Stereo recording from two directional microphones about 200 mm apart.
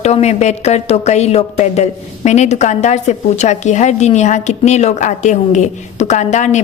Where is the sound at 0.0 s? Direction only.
35° left (ahead or behind).